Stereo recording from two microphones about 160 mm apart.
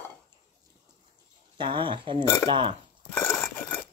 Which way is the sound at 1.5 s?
30° right (ahead or behind).